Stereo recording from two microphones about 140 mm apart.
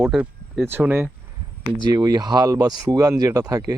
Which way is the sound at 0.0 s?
5° right (ahead or behind).